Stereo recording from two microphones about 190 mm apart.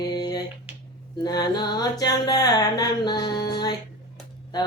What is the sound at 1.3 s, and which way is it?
Speech, 20° left (ahead or behind).